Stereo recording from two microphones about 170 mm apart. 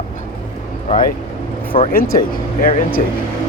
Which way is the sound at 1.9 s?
60° left (ahead or behind).